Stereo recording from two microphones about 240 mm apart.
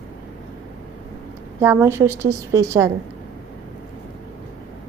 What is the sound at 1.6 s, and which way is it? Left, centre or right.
A woman's voice, centre.